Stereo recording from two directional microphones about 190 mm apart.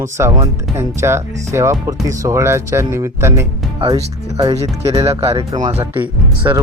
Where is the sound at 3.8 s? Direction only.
25° right (ahead or behind).